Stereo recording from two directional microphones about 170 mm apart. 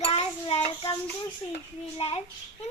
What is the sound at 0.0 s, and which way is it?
Child singing, 35° left (ahead or behind).